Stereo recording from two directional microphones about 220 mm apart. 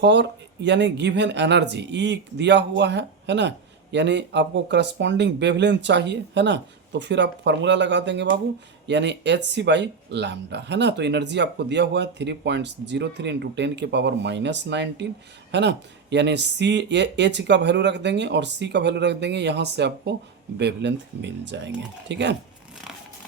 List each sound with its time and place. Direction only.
0.0 s speech: 50° right (ahead or behind)